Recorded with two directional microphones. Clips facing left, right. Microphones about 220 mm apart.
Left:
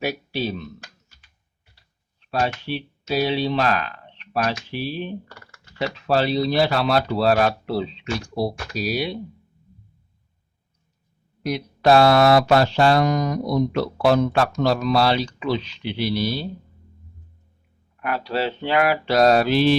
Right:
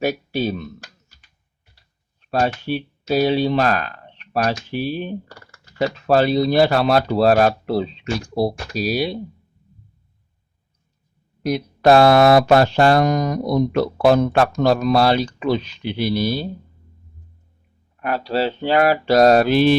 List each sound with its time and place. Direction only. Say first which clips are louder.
0.0 s speech: right 4 dB; 45° right (ahead or behind)
2.2 s speech: right 4 dB; 45° right (ahead or behind)
11.4 s speech: right 3 dB; 45° right (ahead or behind)
18.0 s mantra: right 3 dB; 35° right (ahead or behind); by 19.7 s 50° right (ahead or behind)